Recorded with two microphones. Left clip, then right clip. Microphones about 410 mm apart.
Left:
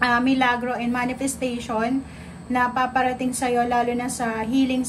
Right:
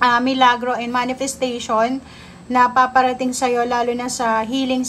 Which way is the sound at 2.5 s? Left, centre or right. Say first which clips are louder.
Right 7 dB; centre.